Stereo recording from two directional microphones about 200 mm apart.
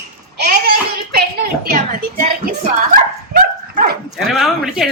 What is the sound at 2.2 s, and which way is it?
Speech, 40° right (ahead or behind).